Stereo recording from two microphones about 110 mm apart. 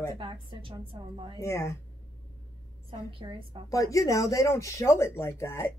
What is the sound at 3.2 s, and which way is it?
Speech, 45° right (ahead or behind).